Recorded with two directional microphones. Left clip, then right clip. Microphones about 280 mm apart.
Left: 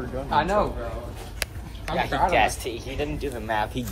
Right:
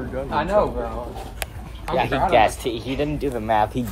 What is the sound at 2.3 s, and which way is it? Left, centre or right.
Speech, right.